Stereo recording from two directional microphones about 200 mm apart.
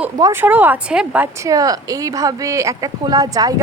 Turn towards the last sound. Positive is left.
turn(degrees=-20)  # may be behind; listen again after turning